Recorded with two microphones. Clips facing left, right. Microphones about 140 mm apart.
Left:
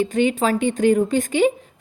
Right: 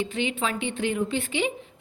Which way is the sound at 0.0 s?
45° left (ahead or behind).